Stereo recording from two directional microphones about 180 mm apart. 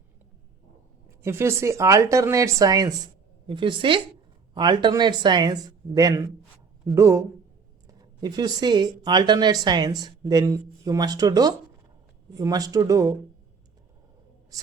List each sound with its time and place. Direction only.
1.2 s speech: 15° right (ahead or behind)